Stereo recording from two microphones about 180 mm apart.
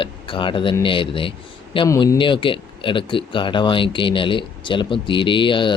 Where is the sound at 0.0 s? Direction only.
25° left (ahead or behind).